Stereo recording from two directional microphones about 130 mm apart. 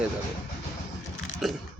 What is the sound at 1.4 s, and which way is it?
Speech, centre (ahead or behind).